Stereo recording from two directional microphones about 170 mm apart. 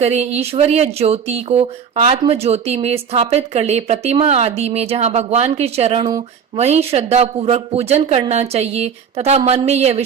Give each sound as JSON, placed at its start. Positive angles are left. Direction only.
{"t": 0.0, "sound": "speech", "side_deg": -40}